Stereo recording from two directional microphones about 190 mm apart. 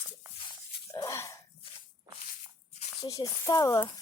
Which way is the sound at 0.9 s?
15° left (ahead or behind).